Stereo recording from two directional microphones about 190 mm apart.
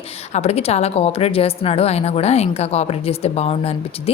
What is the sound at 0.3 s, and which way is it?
A woman's voice, 35° left (ahead or behind).